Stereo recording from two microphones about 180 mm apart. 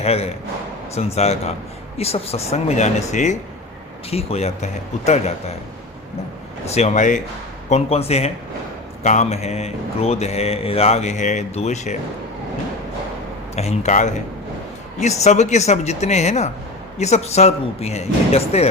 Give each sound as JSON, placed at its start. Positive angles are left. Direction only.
{"t": 0.0, "sound": "a man's voice", "side_deg": 35}
{"t": 6.7, "sound": "a man's voice", "side_deg": 40}
{"t": 13.6, "sound": "a man's voice", "side_deg": 40}